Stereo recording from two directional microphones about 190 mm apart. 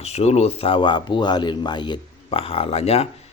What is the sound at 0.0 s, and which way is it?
A man's voice, 35° left (ahead or behind).